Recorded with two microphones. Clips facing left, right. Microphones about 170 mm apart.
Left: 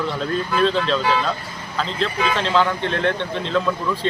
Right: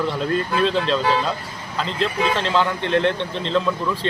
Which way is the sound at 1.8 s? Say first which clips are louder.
Right 1 dB; centre (ahead or behind).